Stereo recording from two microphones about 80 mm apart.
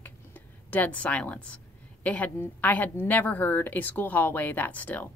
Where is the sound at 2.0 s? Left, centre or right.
Left.